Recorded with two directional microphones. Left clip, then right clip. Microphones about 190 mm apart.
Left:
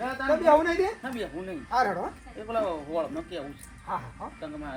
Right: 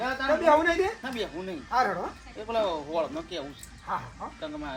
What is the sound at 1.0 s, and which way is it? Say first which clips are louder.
Speech: right 1 dB; 20° right (ahead or behind).